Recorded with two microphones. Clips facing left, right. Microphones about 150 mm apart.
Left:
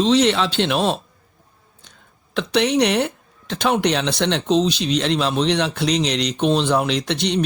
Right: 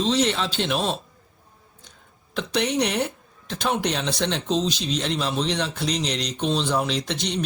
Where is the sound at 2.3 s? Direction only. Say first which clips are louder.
Left 6 dB; 80° left.